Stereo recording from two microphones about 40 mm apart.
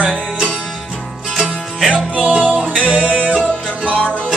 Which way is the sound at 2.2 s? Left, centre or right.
Right.